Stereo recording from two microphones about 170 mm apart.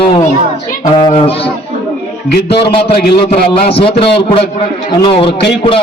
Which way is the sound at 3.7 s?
35° left (ahead or behind).